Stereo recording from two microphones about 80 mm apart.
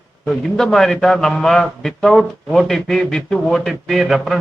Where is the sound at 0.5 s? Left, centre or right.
Centre.